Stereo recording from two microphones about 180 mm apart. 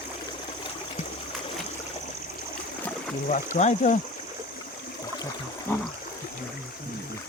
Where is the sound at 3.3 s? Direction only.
40° left (ahead or behind).